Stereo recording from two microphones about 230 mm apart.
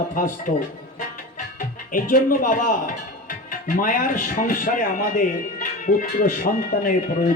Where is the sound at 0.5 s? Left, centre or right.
Left.